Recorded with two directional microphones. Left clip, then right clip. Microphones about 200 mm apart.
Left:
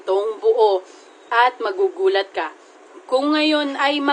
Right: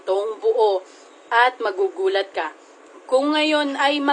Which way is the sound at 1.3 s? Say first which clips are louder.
Left 1 dB; 5° right (ahead or behind).